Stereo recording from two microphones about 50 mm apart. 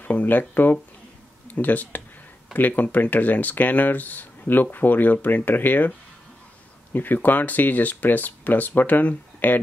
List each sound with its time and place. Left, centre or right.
0.0 s speech: left